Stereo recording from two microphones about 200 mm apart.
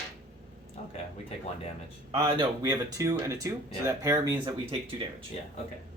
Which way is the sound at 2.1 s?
20° right (ahead or behind).